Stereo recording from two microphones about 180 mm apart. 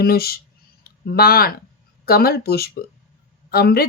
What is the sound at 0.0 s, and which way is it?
Speech, 60° left (ahead or behind).